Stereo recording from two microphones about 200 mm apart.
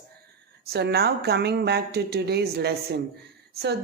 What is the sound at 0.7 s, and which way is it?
A woman's voice, 55° right (ahead or behind).